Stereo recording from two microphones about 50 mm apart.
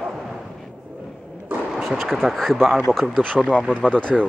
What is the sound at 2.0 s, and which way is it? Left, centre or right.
Speech, centre.